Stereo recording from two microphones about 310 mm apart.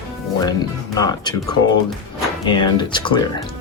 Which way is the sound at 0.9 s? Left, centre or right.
Centre.